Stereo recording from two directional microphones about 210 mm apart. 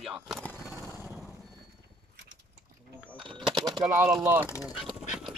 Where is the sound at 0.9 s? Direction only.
Centre (ahead or behind).